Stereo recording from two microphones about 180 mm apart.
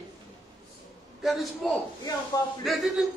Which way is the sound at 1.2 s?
Centre (ahead or behind).